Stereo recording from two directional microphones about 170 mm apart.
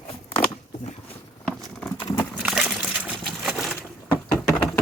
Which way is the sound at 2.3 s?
5° right (ahead or behind).